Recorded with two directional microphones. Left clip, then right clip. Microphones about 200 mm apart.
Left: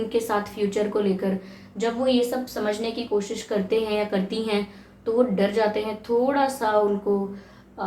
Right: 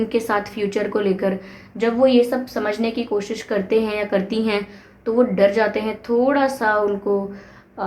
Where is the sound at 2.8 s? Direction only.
30° right (ahead or behind).